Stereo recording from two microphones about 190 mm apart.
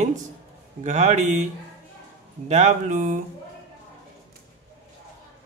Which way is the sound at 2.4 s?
40° right (ahead or behind).